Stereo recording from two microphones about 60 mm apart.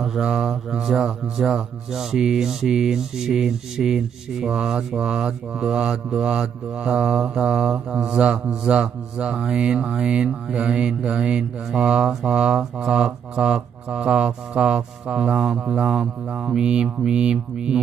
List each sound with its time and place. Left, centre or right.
0.2 s speech: centre